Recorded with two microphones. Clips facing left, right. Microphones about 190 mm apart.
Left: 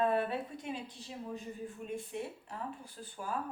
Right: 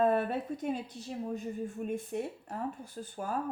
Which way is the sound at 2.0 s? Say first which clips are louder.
Right 4 dB; 45° right (ahead or behind).